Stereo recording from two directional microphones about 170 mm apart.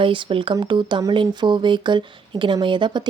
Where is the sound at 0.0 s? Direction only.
30° right (ahead or behind).